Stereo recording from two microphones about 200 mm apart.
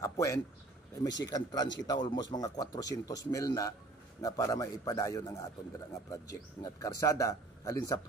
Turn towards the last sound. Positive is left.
turn(degrees=15)  # may be behind; listen again after turning